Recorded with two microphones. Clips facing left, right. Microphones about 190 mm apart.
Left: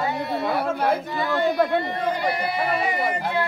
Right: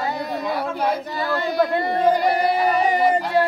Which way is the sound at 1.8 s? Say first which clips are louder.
Right 6 dB; 40° right (ahead or behind).